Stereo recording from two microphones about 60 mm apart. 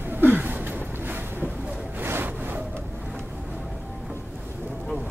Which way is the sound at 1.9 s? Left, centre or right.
Right.